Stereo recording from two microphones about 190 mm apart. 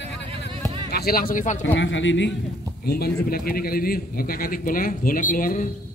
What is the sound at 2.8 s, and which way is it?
A man's voice, 55° left (ahead or behind).